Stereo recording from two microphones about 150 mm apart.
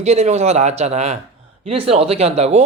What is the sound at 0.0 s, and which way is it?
A woman's voice, 50° right (ahead or behind).